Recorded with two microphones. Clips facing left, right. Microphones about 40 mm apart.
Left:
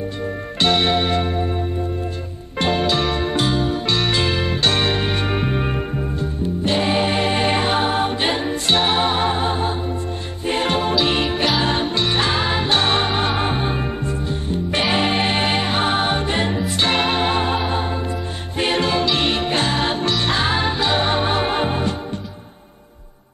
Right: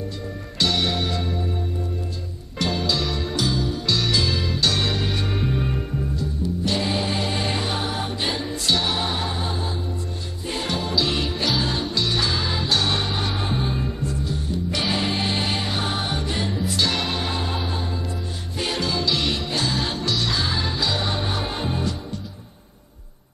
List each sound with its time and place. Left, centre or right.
0.6 s music: left
2.6 s music: left
18.6 s music: left